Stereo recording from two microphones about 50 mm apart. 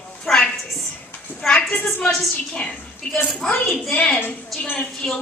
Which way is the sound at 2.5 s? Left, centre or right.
Centre.